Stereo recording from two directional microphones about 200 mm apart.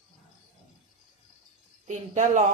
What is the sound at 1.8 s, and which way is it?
Speech, 35° right (ahead or behind).